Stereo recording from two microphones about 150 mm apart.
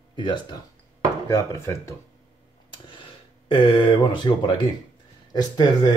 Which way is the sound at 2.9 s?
35° left (ahead or behind).